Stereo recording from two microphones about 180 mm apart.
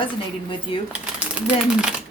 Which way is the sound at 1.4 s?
5° right (ahead or behind).